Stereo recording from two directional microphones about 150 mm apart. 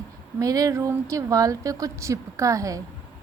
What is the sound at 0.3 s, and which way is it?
Speech, 25° right (ahead or behind).